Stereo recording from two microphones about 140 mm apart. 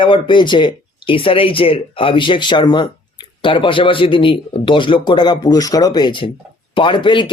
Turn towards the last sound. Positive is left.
turn(degrees=35)  # may be behind; listen again after turning